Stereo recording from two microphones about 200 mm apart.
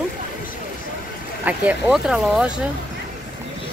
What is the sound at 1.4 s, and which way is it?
Speech, 5° right (ahead or behind).